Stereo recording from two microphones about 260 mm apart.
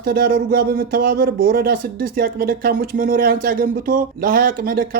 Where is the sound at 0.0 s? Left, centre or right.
Right.